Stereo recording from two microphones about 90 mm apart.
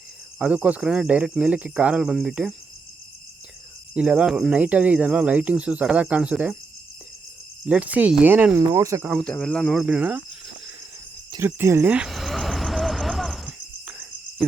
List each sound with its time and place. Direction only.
0.3 s speech: 15° right (ahead or behind)
3.9 s speech: 15° right (ahead or behind)
7.6 s speech: 15° right (ahead or behind)
8.5 s speech: 35° right (ahead or behind)
9.2 s speech: 10° left (ahead or behind)
9.7 s speech: 10° right (ahead or behind)
11.3 s cricket: 25° right (ahead or behind)
11.9 s a sound: centre (ahead or behind)
13.8 s cricket: 10° right (ahead or behind)